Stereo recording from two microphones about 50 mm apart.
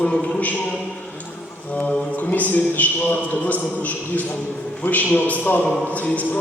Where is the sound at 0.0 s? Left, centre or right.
Left.